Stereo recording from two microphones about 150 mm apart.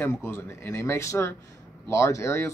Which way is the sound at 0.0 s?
15° left (ahead or behind).